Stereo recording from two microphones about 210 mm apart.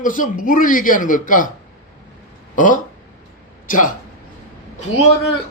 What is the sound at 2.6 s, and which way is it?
A man's voice, 40° left (ahead or behind).